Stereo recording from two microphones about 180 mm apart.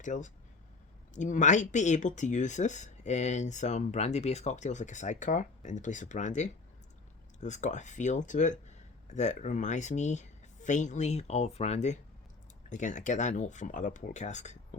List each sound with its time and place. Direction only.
0.0 s speech: 45° left (ahead or behind)